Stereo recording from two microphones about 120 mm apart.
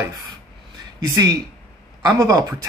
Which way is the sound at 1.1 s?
30° right (ahead or behind).